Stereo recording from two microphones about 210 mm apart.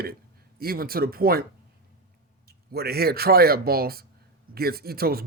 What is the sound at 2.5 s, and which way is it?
Speech, 50° right (ahead or behind).